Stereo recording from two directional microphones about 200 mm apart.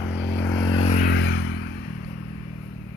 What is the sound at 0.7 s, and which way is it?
Vehicle, 25° left (ahead or behind).